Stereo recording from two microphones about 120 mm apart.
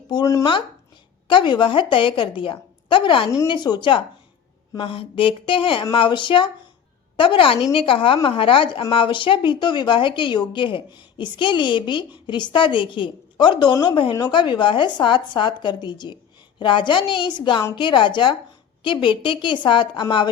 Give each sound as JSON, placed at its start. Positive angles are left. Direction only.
{"t": 0.1, "sound": "speech", "side_deg": 40}
{"t": 1.3, "sound": "a woman's voice", "side_deg": 40}